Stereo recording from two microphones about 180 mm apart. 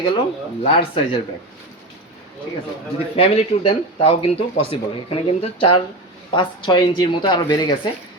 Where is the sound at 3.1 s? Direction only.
35° left (ahead or behind).